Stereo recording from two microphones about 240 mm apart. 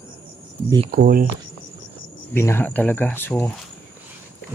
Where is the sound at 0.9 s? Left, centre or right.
Right.